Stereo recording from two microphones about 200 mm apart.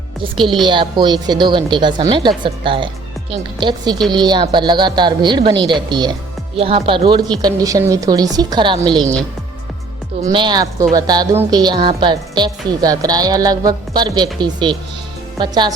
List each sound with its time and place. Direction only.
0.6 s speech: 25° right (ahead or behind)
10.2 s speech: 20° right (ahead or behind)